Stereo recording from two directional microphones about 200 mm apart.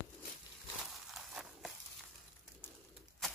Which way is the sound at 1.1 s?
Centre (ahead or behind).